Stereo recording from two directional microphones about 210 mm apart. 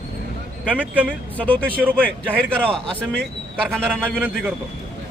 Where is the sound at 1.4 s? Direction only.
5° left (ahead or behind).